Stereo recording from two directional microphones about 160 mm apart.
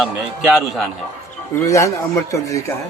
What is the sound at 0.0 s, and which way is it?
Speech, centre (ahead or behind).